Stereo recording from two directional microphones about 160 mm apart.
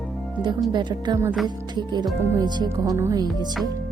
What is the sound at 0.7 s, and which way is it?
Speech, 30° right (ahead or behind).